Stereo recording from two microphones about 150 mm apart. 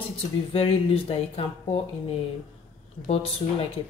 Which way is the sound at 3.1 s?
40° left (ahead or behind).